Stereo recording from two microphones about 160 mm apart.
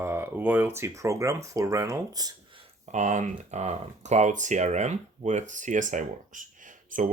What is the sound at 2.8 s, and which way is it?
Speech, 50° right (ahead or behind).